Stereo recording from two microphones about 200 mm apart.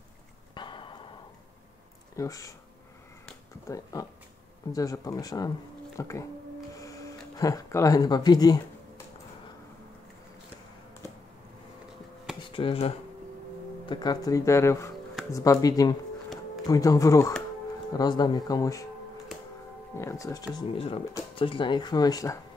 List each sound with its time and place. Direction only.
0.6 s a sound: 25° left (ahead or behind)
2.1 s speech: 15° left (ahead or behind)
3.6 s speech: 15° left (ahead or behind)
6.8 s a sound: 15° left (ahead or behind)
12.4 s speech: 25° left (ahead or behind)
20.0 s speech: 15° left (ahead or behind)
20.5 s speech: 30° left (ahead or behind)